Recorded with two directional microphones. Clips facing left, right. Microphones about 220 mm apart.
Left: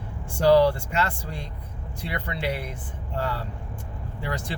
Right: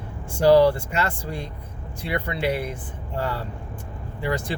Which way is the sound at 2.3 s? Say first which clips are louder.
Right 4 dB; 55° right (ahead or behind).